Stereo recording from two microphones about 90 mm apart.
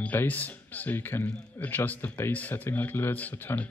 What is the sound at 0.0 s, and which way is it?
A man's voice, 20° left (ahead or behind).